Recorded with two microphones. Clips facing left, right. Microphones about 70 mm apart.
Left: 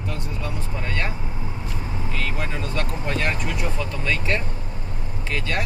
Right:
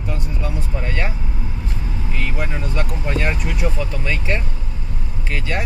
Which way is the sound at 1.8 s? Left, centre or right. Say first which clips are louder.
Right 1 dB; left.